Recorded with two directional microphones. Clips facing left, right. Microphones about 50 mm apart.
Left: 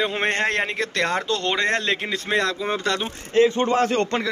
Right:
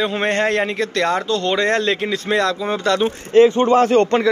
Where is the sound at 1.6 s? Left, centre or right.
Centre.